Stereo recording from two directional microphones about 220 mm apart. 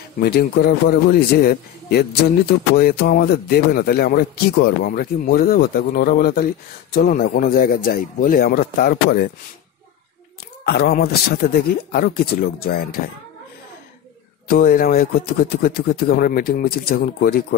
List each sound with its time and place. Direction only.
0.2 s a man's voice: 45° left (ahead or behind)
10.6 s a man's voice: 45° left (ahead or behind)
14.5 s a man's voice: 40° left (ahead or behind)